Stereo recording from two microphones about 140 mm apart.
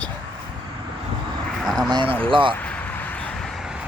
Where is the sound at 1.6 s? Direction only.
Centre (ahead or behind).